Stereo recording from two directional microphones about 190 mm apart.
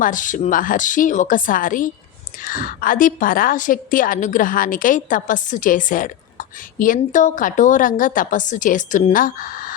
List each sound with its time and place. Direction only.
0.0 s a woman's voice: 45° left (ahead or behind)